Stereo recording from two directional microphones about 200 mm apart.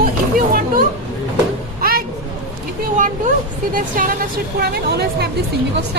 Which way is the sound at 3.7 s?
45° right (ahead or behind).